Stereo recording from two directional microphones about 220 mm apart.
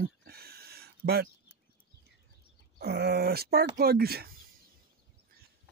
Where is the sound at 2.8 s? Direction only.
50° right (ahead or behind).